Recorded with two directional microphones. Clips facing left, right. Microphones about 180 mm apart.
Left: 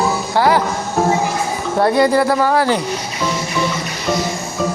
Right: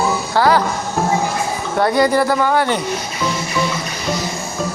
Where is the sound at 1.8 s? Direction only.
30° left (ahead or behind).